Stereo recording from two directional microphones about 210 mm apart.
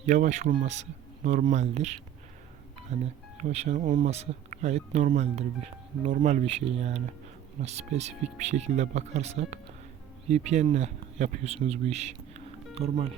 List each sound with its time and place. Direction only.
0.0 s speech: 35° right (ahead or behind)